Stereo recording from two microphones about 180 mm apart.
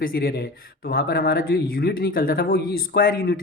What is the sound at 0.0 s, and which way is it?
Speech, 60° left (ahead or behind).